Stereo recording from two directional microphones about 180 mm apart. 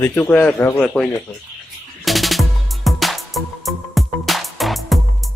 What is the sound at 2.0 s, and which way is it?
Music, centre (ahead or behind).